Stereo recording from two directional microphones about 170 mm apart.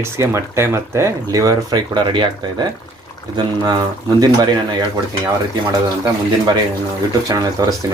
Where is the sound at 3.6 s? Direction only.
25° right (ahead or behind).